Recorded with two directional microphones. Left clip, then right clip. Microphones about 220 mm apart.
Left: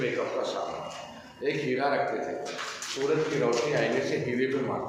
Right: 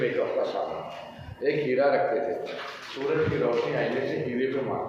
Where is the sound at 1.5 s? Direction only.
10° left (ahead or behind).